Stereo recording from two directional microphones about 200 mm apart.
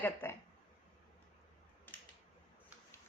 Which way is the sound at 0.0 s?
10° left (ahead or behind).